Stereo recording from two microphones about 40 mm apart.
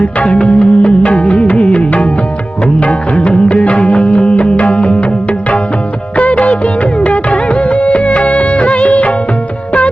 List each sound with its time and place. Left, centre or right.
0.0 s music: left
7.0 s music: left